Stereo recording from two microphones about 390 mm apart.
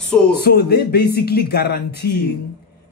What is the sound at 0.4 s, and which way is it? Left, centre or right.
A man's voice, left.